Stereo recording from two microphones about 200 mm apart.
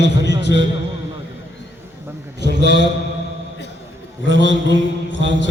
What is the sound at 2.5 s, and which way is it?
Speech, 60° right (ahead or behind).